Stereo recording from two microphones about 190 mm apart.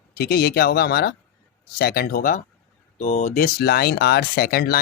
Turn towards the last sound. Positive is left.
turn(degrees=55)  # may be behind; listen again after turning